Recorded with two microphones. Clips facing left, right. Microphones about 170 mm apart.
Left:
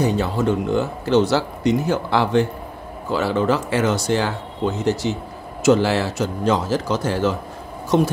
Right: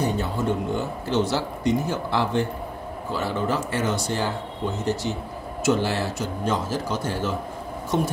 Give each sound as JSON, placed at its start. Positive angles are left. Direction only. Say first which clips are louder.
{"t": 0.0, "sound": "speech", "louder": "left 5 dB", "side_deg": 90}